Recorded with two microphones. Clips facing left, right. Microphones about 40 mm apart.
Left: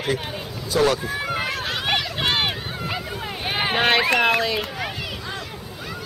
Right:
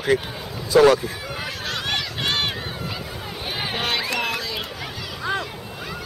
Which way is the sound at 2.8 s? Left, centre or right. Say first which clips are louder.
Left 3 dB; left.